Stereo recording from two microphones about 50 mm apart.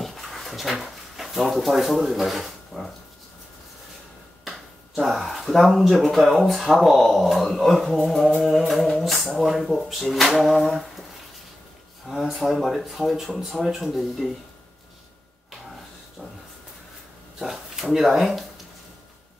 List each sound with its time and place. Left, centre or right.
0.0 s dog: centre
4.5 s speech: centre
12.1 s speech: centre
16.2 s a sound: centre
17.4 s speech: centre